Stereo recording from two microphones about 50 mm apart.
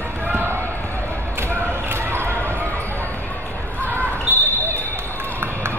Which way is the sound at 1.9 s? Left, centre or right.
Right.